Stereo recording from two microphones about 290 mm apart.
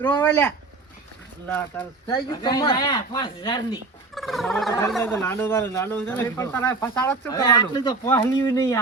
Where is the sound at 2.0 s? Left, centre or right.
Centre.